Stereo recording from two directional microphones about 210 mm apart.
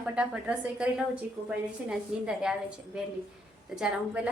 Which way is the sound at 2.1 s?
5° right (ahead or behind).